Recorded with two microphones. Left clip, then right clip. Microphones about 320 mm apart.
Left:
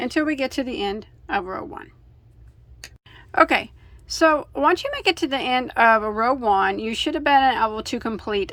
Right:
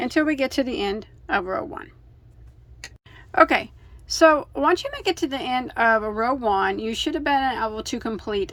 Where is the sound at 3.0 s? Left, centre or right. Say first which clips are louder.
Right 1 dB; centre.